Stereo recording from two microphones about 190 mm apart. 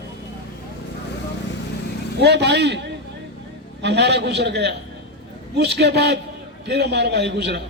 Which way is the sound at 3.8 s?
65° right (ahead or behind).